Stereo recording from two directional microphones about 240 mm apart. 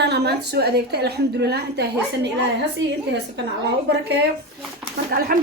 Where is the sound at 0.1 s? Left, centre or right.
Right.